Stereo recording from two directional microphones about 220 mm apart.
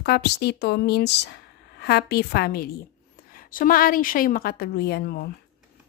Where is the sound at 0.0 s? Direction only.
45° left (ahead or behind).